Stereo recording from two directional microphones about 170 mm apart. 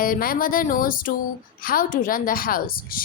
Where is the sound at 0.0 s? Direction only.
55° left (ahead or behind).